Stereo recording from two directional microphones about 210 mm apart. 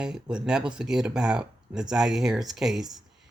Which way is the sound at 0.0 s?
5° right (ahead or behind).